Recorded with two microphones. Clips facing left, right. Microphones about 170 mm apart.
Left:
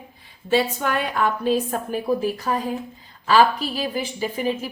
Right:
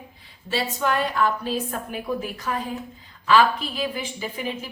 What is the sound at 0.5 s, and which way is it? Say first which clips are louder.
Speech: left 4 dB; 55° left (ahead or behind).